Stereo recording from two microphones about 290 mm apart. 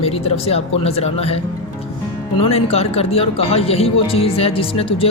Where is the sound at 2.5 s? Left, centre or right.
Left.